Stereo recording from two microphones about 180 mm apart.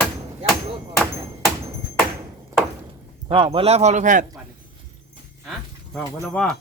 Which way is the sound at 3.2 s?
30° right (ahead or behind).